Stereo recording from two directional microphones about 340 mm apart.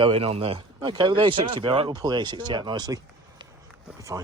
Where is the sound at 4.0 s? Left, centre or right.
Centre.